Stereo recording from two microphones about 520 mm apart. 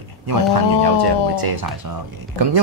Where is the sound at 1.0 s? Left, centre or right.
Right.